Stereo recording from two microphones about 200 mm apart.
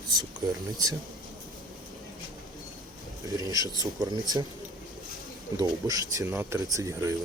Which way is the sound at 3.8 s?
20° right (ahead or behind).